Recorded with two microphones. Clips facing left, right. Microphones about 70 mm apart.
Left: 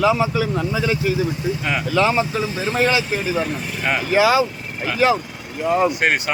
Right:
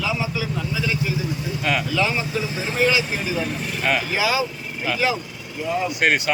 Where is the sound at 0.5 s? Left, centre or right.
Left.